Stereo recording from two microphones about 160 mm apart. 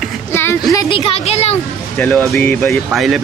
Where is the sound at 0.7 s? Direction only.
35° left (ahead or behind).